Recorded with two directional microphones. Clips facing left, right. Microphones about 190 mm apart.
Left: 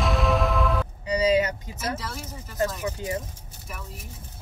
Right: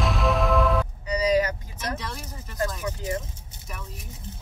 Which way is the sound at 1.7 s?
5° left (ahead or behind).